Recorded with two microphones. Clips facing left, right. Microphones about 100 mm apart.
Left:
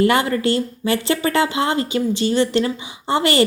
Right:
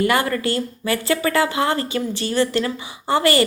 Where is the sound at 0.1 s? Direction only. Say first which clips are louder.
Left 2 dB; 25° left (ahead or behind).